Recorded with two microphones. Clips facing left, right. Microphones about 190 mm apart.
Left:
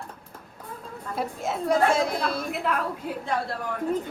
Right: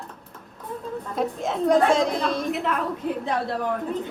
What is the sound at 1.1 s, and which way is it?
A woman's voice, 5° left (ahead or behind).